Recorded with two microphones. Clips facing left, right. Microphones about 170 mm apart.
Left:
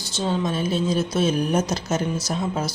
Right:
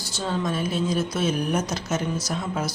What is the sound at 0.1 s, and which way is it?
Speech, 25° left (ahead or behind).